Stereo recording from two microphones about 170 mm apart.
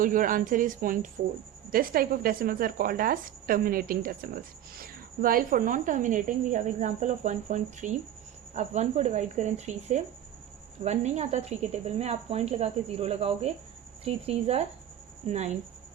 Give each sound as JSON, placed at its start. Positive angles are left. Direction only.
{"t": 0.0, "sound": "a woman's voice", "side_deg": -50}